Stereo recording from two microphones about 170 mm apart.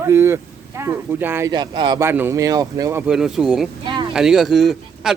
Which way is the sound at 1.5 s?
25° right (ahead or behind).